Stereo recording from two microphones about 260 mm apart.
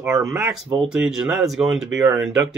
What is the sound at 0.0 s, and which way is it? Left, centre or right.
Speech, centre.